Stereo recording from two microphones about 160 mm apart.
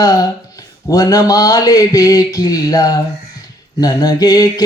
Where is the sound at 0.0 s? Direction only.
20° left (ahead or behind).